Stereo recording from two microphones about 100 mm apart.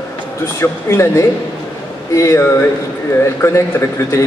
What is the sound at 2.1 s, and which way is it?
Speech, 25° left (ahead or behind).